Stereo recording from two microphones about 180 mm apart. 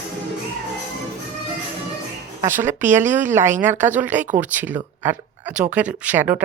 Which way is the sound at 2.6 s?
10° right (ahead or behind).